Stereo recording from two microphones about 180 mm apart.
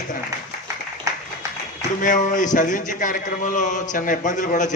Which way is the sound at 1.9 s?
45° left (ahead or behind).